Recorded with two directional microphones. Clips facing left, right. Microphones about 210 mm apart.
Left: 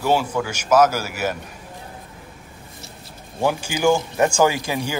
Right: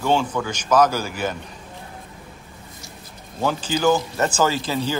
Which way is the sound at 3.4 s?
10° left (ahead or behind).